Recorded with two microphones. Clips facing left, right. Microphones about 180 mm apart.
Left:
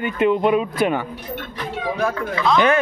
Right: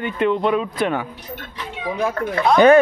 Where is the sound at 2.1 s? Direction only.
55° right (ahead or behind).